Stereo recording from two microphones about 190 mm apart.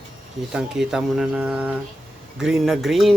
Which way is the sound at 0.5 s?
5° right (ahead or behind).